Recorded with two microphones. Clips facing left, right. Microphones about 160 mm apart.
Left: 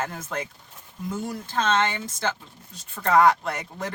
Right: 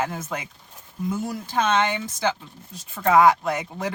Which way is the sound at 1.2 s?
10° right (ahead or behind).